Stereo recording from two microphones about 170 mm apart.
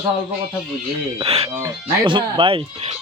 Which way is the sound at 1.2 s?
35° right (ahead or behind).